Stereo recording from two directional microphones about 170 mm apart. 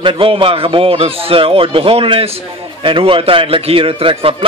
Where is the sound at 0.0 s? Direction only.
30° right (ahead or behind).